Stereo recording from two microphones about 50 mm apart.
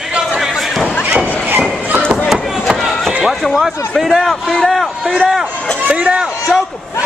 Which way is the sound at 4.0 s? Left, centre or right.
Centre.